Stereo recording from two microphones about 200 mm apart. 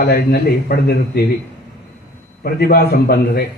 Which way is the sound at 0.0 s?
50° left (ahead or behind).